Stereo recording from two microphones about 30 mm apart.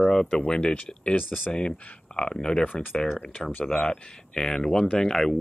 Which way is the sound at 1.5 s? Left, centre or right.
Left.